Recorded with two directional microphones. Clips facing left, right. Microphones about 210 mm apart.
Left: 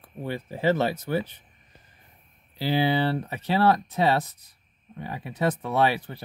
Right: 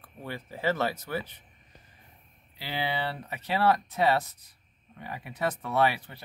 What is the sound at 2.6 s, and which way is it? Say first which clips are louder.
Speech: left 9 dB; 35° left (ahead or behind).